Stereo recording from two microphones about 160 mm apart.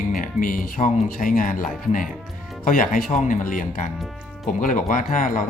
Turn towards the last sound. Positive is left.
turn(degrees=60)  # may be behind; listen again after turning